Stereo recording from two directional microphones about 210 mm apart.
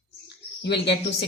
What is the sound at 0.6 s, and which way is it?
Speech, 55° left (ahead or behind).